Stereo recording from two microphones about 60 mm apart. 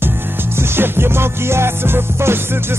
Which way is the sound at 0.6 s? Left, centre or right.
Right.